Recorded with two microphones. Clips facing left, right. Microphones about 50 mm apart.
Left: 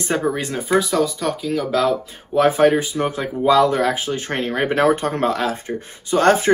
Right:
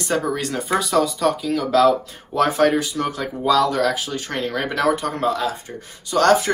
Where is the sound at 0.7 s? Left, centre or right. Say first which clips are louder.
Left 2 dB; centre.